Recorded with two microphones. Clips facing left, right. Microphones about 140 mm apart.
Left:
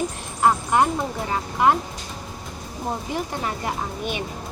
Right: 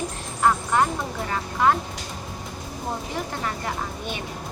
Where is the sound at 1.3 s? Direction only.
20° left (ahead or behind).